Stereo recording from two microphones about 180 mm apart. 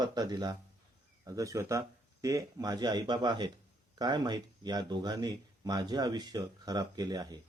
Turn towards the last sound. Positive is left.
turn(degrees=-20)  # may be behind; listen again after turning